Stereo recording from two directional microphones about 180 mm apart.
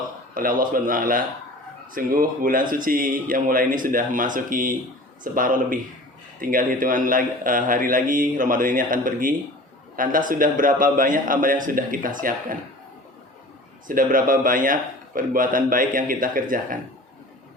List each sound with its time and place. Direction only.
0.3 s speech: 50° right (ahead or behind)
13.8 s speech: 50° right (ahead or behind)